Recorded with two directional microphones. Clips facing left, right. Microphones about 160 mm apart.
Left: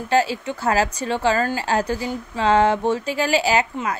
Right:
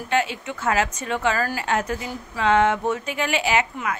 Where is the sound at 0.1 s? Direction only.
35° left (ahead or behind).